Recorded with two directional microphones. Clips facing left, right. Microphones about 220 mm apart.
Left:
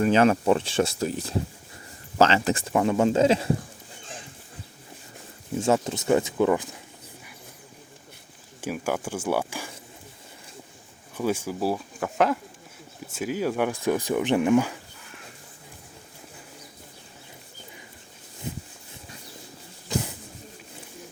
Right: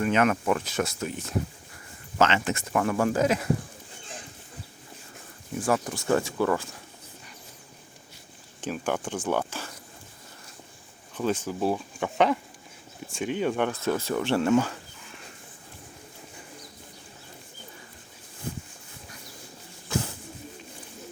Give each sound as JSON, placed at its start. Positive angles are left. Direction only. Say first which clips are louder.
{"t": 0.0, "sound": "speech", "louder": "left 4 dB", "side_deg": 30}
{"t": 2.7, "sound": "speech", "louder": "left 3 dB", "side_deg": 20}
{"t": 5.5, "sound": "speech", "louder": "left 3 dB", "side_deg": 25}
{"t": 8.6, "sound": "speech", "louder": "left 1 dB", "side_deg": 10}
{"t": 11.1, "sound": "speech", "louder": "left 1 dB", "side_deg": 10}